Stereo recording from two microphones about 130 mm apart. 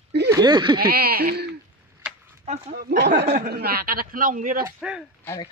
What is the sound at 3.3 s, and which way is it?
A man's voice, 90° right.